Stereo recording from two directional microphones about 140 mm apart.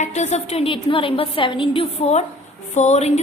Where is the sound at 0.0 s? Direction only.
55° left (ahead or behind).